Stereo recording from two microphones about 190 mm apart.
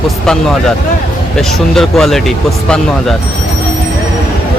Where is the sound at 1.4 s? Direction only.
Centre (ahead or behind).